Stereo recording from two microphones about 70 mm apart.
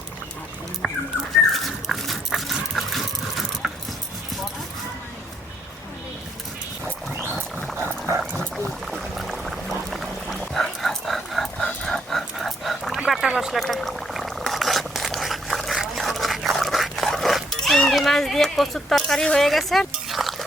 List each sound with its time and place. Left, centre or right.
1.5 s dog: centre
7.8 s dog: right
8.3 s dog: centre
8.9 s music: centre
10.5 s dog: centre
13.1 s a sound: centre